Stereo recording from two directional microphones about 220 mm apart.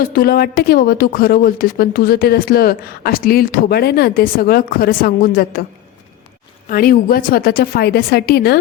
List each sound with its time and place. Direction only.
0.0 s speech: 40° left (ahead or behind)
6.7 s speech: 40° left (ahead or behind)